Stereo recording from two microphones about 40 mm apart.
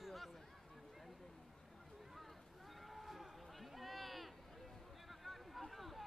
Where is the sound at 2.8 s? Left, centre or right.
Centre.